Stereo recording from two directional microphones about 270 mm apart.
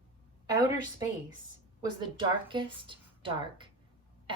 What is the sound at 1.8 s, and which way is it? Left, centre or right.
A woman's voice, centre.